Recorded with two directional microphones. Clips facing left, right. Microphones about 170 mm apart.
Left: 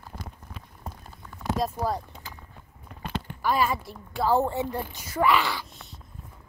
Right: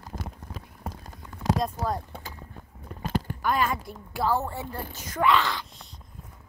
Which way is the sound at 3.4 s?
5° left (ahead or behind).